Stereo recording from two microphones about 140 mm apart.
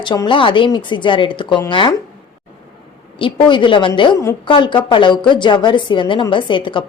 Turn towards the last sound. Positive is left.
turn(degrees=35)  # may be behind; listen again after turning